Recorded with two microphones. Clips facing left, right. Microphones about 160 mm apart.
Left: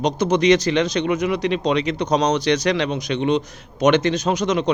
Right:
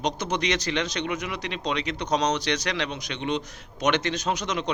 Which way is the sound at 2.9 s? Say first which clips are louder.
Left 9 dB; 45° left (ahead or behind).